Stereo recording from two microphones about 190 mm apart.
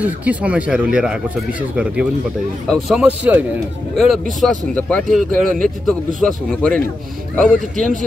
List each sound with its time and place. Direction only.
0.0 s speech: 10° right (ahead or behind)